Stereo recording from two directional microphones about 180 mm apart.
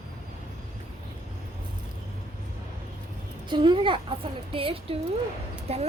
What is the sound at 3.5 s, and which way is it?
A child's voice, 25° right (ahead or behind).